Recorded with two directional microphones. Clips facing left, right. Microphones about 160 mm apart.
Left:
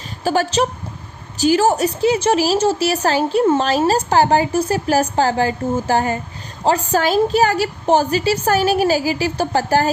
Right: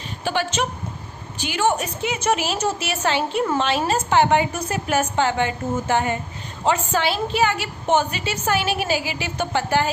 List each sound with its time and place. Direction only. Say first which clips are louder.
0.3 s a woman's voice: left 6 dB; 40° left (ahead or behind)